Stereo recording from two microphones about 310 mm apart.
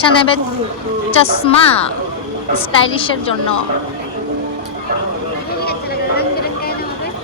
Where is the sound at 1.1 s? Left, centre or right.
Centre.